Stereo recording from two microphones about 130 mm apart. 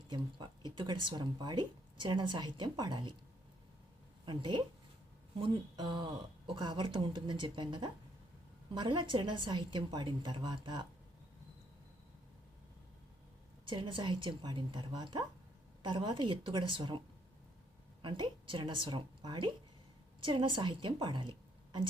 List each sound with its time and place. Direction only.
0.1 s speech: 35° right (ahead or behind)
4.3 s speech: 35° right (ahead or behind)
13.7 s speech: 40° right (ahead or behind)
18.0 s a woman's voice: 40° right (ahead or behind)